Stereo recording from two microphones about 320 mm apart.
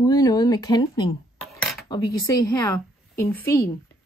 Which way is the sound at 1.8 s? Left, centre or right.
Centre.